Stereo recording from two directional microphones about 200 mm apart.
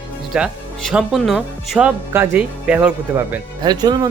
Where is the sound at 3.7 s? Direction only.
20° right (ahead or behind).